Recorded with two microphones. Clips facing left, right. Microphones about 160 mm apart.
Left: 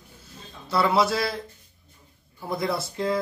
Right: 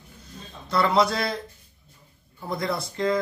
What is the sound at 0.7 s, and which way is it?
Speech, 5° left (ahead or behind).